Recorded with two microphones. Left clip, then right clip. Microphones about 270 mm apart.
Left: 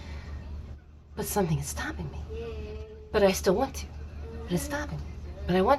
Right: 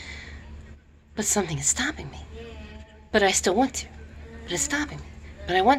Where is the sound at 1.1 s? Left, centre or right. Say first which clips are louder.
Right 3 dB; right.